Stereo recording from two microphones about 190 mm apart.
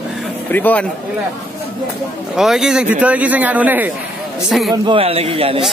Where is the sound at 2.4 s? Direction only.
Centre (ahead or behind).